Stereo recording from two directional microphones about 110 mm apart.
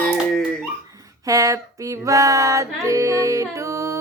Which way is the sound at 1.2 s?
30° right (ahead or behind).